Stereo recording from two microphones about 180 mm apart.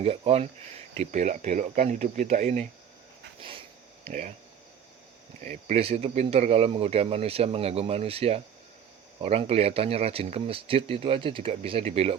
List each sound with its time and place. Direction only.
0.0 s speech: 35° right (ahead or behind)
5.4 s speech: 40° right (ahead or behind)